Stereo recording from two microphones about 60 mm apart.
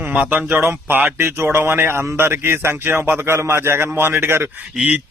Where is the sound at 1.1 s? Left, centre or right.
Right.